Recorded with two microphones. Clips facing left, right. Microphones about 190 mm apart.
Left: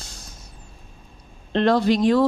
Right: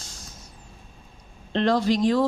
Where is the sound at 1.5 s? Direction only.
60° left (ahead or behind).